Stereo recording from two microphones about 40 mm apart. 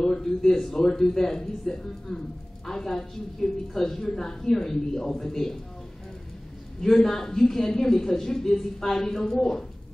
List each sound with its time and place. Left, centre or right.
0.0 s a woman's voice: centre
6.8 s a woman's voice: centre